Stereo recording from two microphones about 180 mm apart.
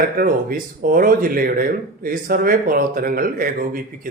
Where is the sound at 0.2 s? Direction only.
50° right (ahead or behind).